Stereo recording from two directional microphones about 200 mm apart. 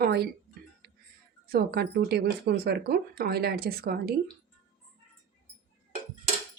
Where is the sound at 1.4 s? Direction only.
50° right (ahead or behind).